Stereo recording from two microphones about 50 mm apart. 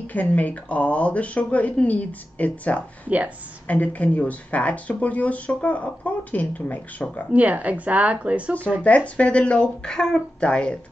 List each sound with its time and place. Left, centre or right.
0.0 s speech: left
7.3 s speech: right
8.8 s speech: left